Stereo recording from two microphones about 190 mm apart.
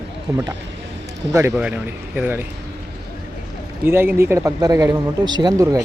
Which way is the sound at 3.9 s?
10° right (ahead or behind).